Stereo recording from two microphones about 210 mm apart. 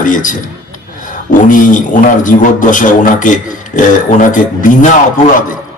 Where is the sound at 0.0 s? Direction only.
40° left (ahead or behind).